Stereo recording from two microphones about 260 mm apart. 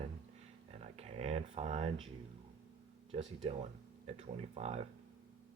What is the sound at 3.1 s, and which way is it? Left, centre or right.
Speech, right.